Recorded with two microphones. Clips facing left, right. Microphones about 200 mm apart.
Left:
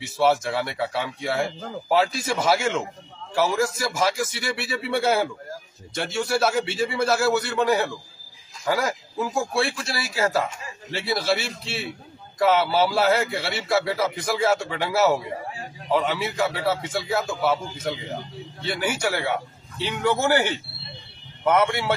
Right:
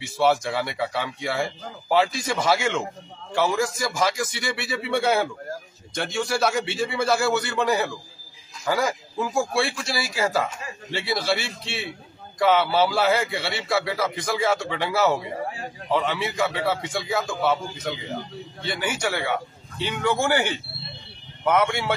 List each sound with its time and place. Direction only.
0.0 s speech: centre (ahead or behind)